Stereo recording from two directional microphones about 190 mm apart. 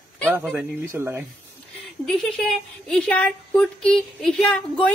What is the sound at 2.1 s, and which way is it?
Speech, centre (ahead or behind).